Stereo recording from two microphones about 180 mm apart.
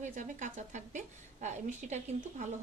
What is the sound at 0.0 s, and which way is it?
A woman's voice, 45° right (ahead or behind).